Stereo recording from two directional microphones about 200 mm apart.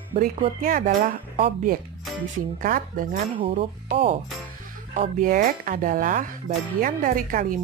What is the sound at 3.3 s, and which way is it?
Speech, 30° right (ahead or behind).